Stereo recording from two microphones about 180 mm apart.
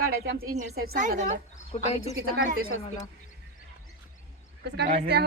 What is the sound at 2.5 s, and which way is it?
Speech, 55° right (ahead or behind).